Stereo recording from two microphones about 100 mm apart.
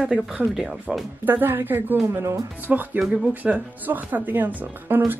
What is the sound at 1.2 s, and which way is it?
Speech, 20° right (ahead or behind).